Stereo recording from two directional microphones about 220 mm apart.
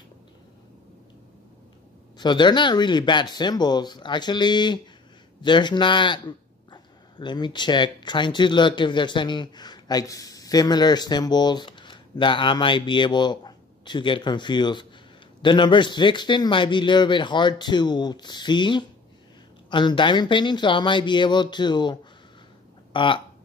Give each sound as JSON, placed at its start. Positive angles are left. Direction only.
{"t": 2.1, "sound": "a man's voice", "side_deg": 20}
{"t": 22.9, "sound": "a man's voice", "side_deg": 20}